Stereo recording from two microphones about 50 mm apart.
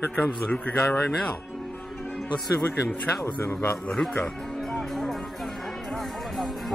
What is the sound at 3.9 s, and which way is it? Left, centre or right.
Music, centre.